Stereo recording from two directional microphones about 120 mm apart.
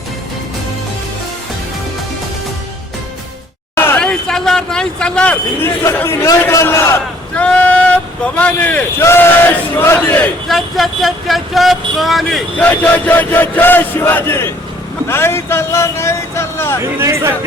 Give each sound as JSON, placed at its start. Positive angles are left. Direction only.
{"t": 3.8, "sound": "a sound", "side_deg": 20}
{"t": 4.0, "sound": "a man's voice", "side_deg": 5}
{"t": 7.3, "sound": "speech", "side_deg": 10}
{"t": 10.5, "sound": "speech", "side_deg": 0}
{"t": 12.7, "sound": "chant", "side_deg": 15}
{"t": 15.0, "sound": "speech", "side_deg": 20}
{"t": 17.0, "sound": "speech", "side_deg": -20}